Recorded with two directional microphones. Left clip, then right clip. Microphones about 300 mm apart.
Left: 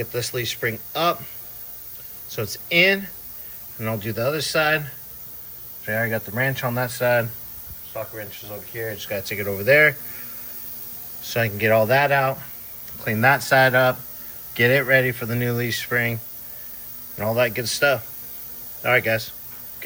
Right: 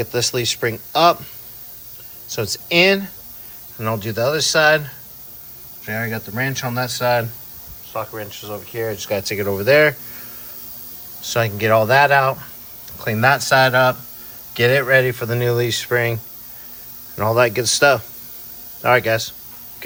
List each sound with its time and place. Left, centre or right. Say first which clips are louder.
0.0 s speech: right 6 dB; centre
2.3 s speech: right 3 dB; centre
4.0 s speech: right 5 dB; centre
5.8 s speech: left 1 dB; centre
7.9 s speech: right 5 dB; centre
11.2 s speech: right 3 dB; centre
15.9 s speech: right 3 dB; right
17.3 s speech: right 6 dB; centre